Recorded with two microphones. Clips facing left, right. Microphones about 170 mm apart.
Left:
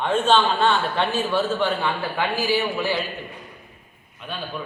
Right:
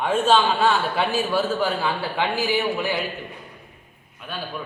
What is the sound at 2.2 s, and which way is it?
Speech, 15° right (ahead or behind).